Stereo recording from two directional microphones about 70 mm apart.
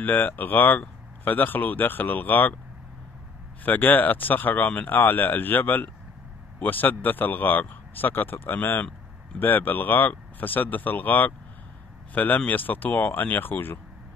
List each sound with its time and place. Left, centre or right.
0.0 s speech: left
3.6 s speech: left